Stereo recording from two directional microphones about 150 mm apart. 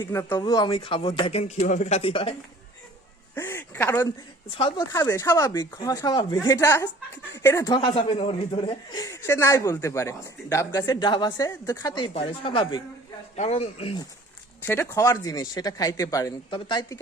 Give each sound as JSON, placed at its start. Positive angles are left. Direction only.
{"t": 0.0, "sound": "speech", "side_deg": 15}
{"t": 0.3, "sound": "speech", "side_deg": 30}
{"t": 3.3, "sound": "speech", "side_deg": 15}
{"t": 4.4, "sound": "speech", "side_deg": 35}
{"t": 4.9, "sound": "speech", "side_deg": 20}
{"t": 8.9, "sound": "speech", "side_deg": 25}
{"t": 13.3, "sound": "speech", "side_deg": 45}
{"t": 14.7, "sound": "speech", "side_deg": 15}